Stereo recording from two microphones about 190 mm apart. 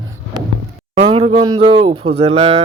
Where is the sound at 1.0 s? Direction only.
30° right (ahead or behind).